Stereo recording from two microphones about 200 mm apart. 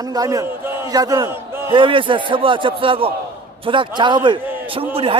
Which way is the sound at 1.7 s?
25° right (ahead or behind).